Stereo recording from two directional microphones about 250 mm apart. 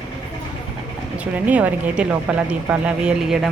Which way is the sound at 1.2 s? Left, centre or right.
Centre.